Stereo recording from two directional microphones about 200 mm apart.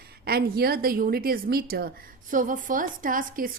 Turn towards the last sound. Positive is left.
turn(degrees=-40)  # may be behind; listen again after turning